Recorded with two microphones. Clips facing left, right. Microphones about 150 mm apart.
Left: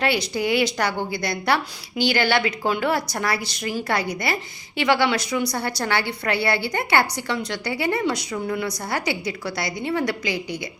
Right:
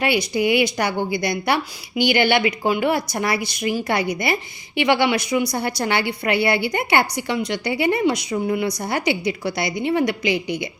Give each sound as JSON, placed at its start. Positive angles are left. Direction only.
{"t": 0.0, "sound": "a woman's voice", "side_deg": -15}